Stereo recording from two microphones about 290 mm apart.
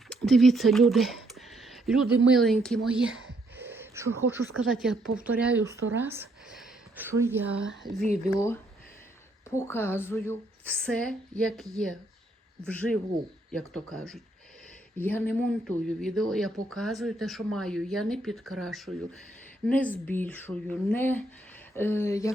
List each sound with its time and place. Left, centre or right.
0.1 s a sound: centre
2.3 s a woman's voice: centre
8.0 s speech: right
8.4 s a woman's voice: centre